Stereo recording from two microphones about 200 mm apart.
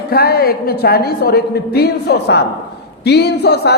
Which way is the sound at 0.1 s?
50° left (ahead or behind).